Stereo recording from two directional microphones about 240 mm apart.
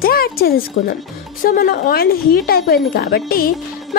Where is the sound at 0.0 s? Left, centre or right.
Left.